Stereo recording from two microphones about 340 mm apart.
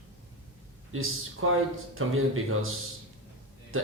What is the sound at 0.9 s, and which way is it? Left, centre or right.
Speech, right.